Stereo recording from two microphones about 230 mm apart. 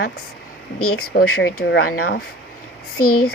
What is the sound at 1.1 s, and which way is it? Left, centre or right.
Speech, left.